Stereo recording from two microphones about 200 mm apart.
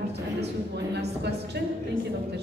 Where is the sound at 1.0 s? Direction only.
55° right (ahead or behind).